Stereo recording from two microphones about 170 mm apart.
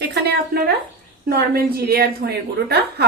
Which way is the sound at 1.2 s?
65° right (ahead or behind).